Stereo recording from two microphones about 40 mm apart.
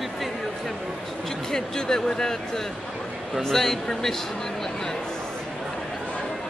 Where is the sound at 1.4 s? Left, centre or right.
Centre.